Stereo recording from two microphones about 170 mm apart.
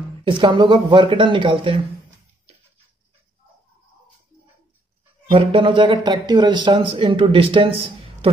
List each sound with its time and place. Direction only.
0.2 s speech: 30° right (ahead or behind)
5.3 s a man's voice: 30° right (ahead or behind)